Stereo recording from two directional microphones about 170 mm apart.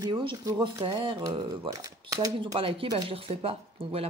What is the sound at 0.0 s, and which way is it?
Speech, 30° right (ahead or behind).